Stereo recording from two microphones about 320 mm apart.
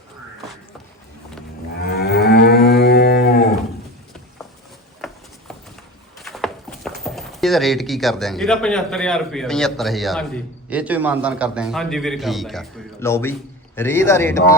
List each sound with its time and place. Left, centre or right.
1.8 s moo: left
4.9 s a sound: centre
6.1 s speech: centre